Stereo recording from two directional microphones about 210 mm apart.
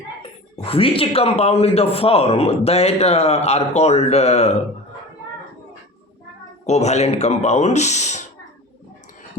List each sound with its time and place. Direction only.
0.2 s speech: 25° left (ahead or behind)
6.7 s speech: 30° left (ahead or behind)